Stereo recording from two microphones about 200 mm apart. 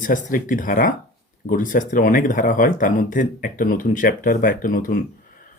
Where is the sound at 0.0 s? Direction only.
40° left (ahead or behind).